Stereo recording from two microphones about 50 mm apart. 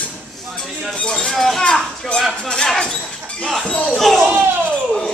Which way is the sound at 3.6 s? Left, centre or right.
Centre.